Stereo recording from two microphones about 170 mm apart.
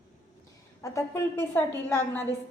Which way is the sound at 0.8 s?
15° left (ahead or behind).